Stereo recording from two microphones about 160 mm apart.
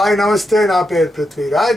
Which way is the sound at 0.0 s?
Centre (ahead or behind).